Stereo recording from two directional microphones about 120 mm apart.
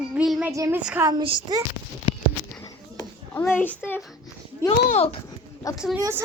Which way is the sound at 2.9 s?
30° left (ahead or behind).